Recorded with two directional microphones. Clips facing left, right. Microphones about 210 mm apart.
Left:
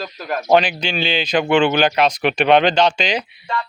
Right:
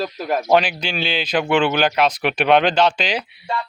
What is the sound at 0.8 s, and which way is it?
Speech, 5° right (ahead or behind).